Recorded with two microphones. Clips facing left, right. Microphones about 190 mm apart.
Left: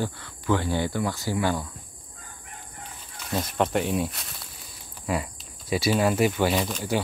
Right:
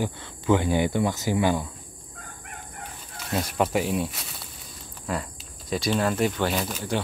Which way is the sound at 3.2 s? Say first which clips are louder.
Even; 5° right (ahead or behind).